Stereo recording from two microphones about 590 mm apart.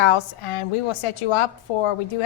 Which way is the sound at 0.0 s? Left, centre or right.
Left.